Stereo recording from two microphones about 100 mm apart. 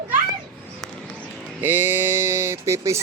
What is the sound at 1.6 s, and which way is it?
Speech, 20° right (ahead or behind).